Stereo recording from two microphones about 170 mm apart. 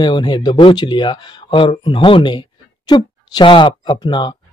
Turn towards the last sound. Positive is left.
turn(degrees=25)  # may be behind; listen again after turning